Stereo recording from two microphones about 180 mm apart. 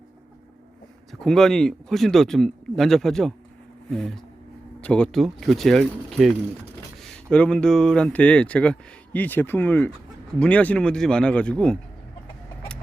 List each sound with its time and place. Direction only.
1.2 s speech: 5° left (ahead or behind)